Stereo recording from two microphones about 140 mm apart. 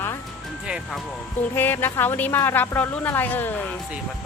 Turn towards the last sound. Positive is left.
turn(degrees=15)  # may be behind; listen again after turning